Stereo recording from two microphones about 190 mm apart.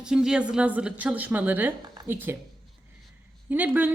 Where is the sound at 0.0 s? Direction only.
5° right (ahead or behind).